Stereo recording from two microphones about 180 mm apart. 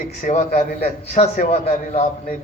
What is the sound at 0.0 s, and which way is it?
A man's voice, 45° left (ahead or behind).